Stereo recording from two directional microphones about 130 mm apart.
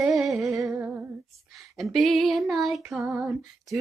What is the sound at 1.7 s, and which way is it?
Speech, centre (ahead or behind).